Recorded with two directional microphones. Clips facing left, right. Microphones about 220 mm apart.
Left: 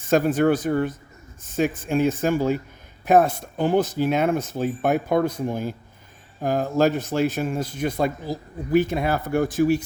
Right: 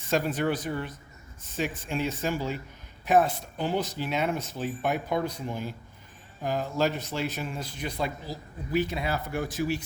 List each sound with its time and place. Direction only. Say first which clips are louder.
0.1 s speech: left 8 dB; 50° left (ahead or behind)